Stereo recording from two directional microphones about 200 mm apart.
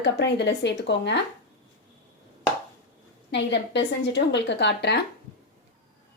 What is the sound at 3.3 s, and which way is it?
A woman's voice, 60° left (ahead or behind).